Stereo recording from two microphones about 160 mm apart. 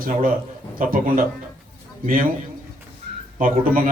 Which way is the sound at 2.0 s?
60° right (ahead or behind).